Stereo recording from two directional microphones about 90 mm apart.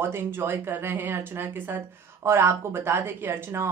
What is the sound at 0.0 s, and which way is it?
Speech, 25° right (ahead or behind).